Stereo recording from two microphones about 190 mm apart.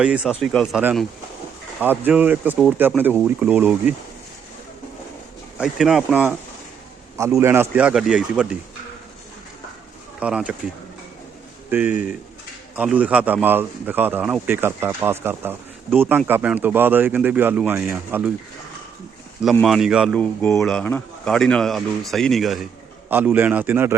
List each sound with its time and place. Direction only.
0.0 s a man's voice: 5° right (ahead or behind)
1.8 s a man's voice: 10° right (ahead or behind)
5.5 s a man's voice: 5° right (ahead or behind)
7.3 s a man's voice: 15° right (ahead or behind)
10.2 s a man's voice: 5° right (ahead or behind)
11.7 s a man's voice: 10° right (ahead or behind)
19.6 s a man's voice: centre (ahead or behind)